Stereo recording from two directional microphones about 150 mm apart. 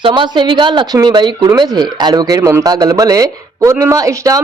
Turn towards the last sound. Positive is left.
turn(degrees=-20)  # may be behind; listen again after turning